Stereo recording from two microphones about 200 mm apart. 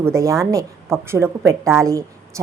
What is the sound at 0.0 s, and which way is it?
A woman's voice, 15° right (ahead or behind).